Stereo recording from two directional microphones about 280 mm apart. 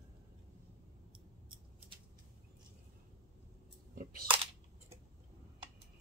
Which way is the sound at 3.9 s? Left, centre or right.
Right.